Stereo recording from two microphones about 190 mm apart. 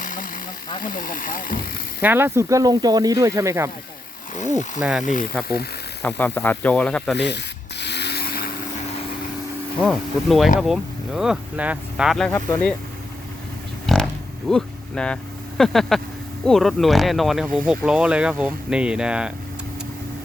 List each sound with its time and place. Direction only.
0.0 s a sound: 45° left (ahead or behind)
0.8 s speech: 45° left (ahead or behind)
2.0 s speech: 10° right (ahead or behind)
4.4 s speech: 40° left (ahead or behind)
4.8 s speech: 5° right (ahead or behind)
5.0 s speech: 45° left (ahead or behind)
6.0 s speech: 10° left (ahead or behind)
7.2 s sanding: 65° left (ahead or behind)
9.8 s speech: centre (ahead or behind)
13.8 s a sound: centre (ahead or behind)
16.5 s speech: centre (ahead or behind)